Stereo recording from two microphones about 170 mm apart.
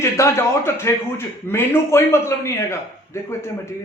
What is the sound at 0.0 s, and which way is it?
A man's voice, 15° left (ahead or behind).